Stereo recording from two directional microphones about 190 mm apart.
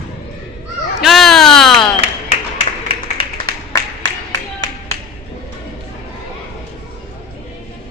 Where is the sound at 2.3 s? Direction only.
35° left (ahead or behind).